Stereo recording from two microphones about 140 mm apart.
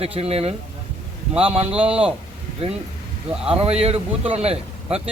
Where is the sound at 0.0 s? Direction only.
45° right (ahead or behind).